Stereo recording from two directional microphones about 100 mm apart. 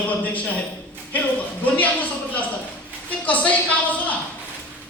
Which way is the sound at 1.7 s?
15° left (ahead or behind).